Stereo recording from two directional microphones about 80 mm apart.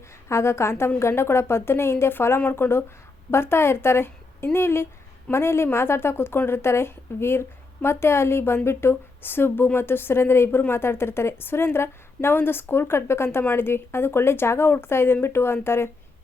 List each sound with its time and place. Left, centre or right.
0.3 s a woman's voice: left